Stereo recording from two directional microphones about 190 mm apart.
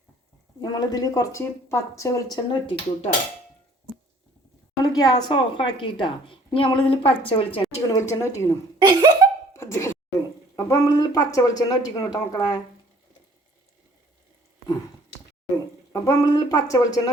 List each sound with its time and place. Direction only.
0.6 s a woman's voice: 20° left (ahead or behind)
2.3 s a woman's voice: 25° left (ahead or behind)
4.8 s a woman's voice: 20° left (ahead or behind)
7.9 s speech: 15° left (ahead or behind)
8.8 s laughter: 20° right (ahead or behind)
9.5 s a sound: 15° left (ahead or behind)
10.5 s a woman's voice: 15° left (ahead or behind)
15.9 s speech: 15° left (ahead or behind)